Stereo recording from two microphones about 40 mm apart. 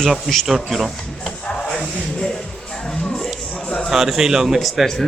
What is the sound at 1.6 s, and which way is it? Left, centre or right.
Music, left.